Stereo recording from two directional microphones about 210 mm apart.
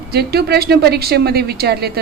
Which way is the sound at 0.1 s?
50° right (ahead or behind).